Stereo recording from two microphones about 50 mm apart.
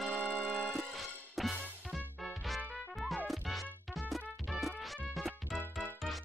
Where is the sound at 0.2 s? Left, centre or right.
Right.